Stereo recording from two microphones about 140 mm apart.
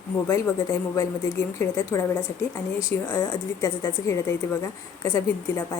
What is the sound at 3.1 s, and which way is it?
A woman's voice, 20° left (ahead or behind).